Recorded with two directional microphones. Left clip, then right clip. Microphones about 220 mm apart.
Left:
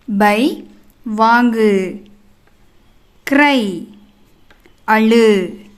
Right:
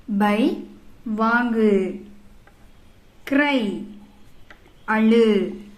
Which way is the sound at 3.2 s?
50° left (ahead or behind).